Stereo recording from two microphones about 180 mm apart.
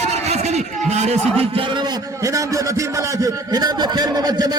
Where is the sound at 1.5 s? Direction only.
30° right (ahead or behind).